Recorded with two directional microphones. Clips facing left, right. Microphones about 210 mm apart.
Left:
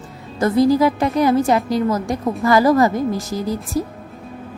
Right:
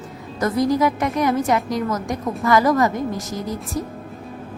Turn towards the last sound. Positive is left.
turn(degrees=35)  # may be behind; listen again after turning